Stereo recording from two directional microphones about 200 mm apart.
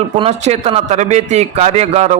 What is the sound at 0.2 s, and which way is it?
A man's voice, 30° right (ahead or behind).